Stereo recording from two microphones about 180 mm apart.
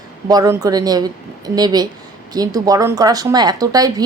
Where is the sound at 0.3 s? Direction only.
20° right (ahead or behind).